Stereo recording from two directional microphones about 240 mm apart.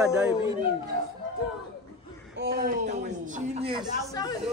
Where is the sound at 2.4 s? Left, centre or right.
Right.